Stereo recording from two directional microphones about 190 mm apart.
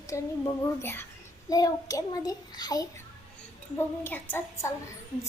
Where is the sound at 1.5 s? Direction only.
20° left (ahead or behind).